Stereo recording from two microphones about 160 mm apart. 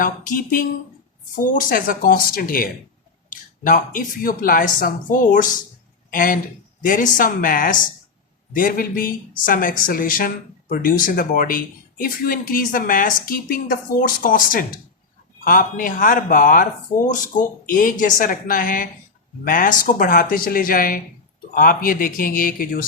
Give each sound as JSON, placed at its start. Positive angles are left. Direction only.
{"t": 0.0, "sound": "speech", "side_deg": 60}